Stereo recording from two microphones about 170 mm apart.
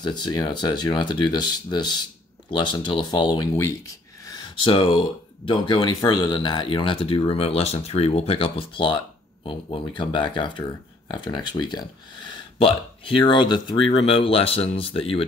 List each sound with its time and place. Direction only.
0.0 s speech: 25° left (ahead or behind)